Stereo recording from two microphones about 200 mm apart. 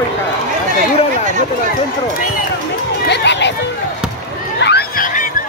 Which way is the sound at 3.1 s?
60° left (ahead or behind).